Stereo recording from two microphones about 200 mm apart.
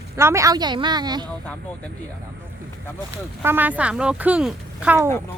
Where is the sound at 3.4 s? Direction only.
10° right (ahead or behind).